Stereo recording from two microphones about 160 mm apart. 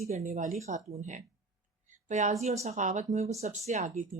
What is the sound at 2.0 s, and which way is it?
Speech, 50° right (ahead or behind).